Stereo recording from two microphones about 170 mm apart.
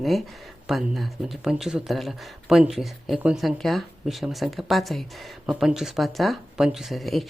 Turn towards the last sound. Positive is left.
turn(degrees=0)  # may be behind; listen again after turning